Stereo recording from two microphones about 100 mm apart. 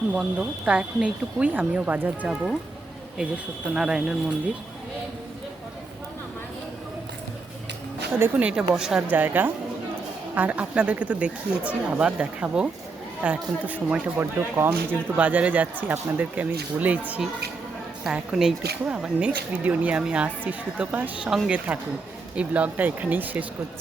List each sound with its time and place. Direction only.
0.1 s speech: 10° right (ahead or behind)
8.2 s speech: 15° right (ahead or behind)
9.0 s speech: 20° right (ahead or behind)
18.0 s speech: 5° right (ahead or behind)